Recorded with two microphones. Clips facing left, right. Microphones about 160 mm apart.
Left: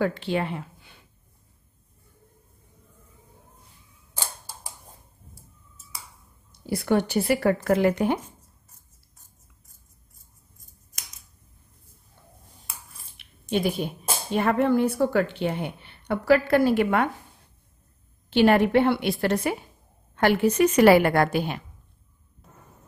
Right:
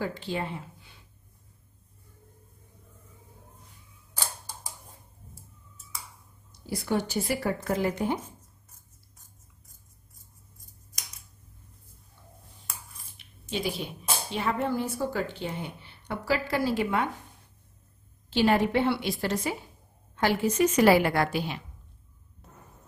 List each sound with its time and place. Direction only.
0.0 s speech: 65° left (ahead or behind)
6.6 s speech: 60° left (ahead or behind)
13.2 s speech: 55° left (ahead or behind)
18.3 s speech: 60° left (ahead or behind)
22.4 s a sound: centre (ahead or behind)